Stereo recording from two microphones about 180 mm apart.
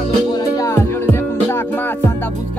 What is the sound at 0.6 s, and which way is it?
Music, 15° left (ahead or behind).